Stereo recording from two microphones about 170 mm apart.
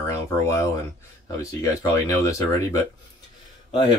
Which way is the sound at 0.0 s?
20° left (ahead or behind).